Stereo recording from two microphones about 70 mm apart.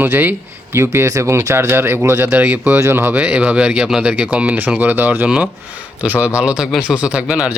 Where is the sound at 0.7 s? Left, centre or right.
Right.